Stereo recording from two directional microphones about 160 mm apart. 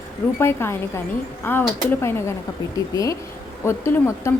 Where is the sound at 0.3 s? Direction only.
15° left (ahead or behind).